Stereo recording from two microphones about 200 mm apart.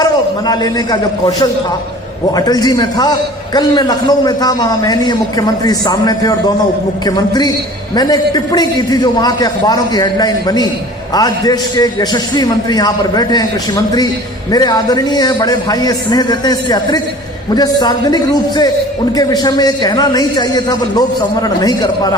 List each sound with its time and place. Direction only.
0.0 s a man's voice: 20° left (ahead or behind)